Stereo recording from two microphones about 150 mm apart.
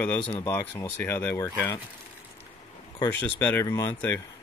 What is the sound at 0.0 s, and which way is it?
Speech, 10° left (ahead or behind).